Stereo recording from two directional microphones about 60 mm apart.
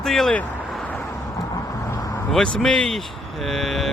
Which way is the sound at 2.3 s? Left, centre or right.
Centre.